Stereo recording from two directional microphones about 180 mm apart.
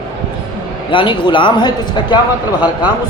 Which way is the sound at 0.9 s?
25° left (ahead or behind).